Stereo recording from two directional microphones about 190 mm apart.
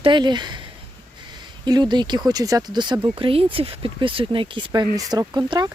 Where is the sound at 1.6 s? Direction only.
20° right (ahead or behind).